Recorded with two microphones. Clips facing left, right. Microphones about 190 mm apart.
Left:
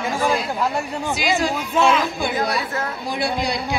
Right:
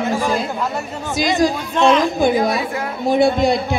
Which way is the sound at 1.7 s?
5° left (ahead or behind).